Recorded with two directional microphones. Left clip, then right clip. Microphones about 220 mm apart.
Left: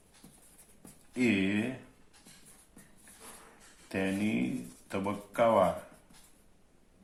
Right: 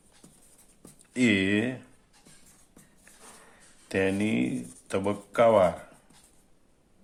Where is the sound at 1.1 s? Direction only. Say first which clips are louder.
Right 5 dB; 45° right (ahead or behind).